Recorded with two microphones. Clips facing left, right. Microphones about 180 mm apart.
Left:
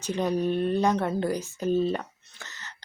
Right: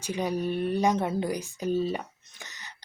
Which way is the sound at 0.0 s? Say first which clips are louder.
Left 3 dB; 10° right (ahead or behind).